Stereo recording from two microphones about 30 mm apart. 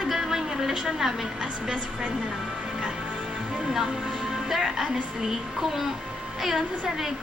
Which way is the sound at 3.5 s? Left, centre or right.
Right.